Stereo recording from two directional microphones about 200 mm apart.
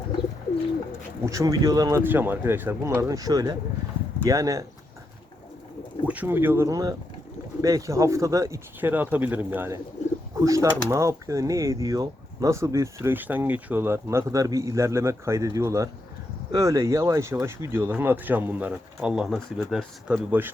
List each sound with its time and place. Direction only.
1.2 s speech: 15° right (ahead or behind)
6.1 s speech: 10° right (ahead or behind)